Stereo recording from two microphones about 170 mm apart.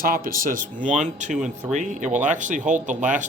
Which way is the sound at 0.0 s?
55° right (ahead or behind).